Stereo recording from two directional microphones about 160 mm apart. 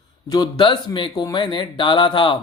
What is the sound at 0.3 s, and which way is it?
Speech, 25° left (ahead or behind).